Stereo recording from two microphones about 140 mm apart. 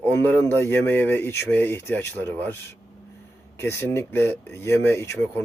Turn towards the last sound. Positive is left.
turn(degrees=15)  # may be behind; listen again after turning